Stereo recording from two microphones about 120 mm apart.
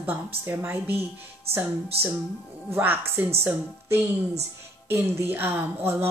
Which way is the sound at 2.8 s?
15° right (ahead or behind).